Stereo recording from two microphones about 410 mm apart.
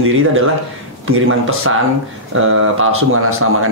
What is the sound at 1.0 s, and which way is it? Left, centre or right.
Speech, right.